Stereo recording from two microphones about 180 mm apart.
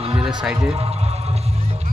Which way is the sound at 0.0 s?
35° right (ahead or behind).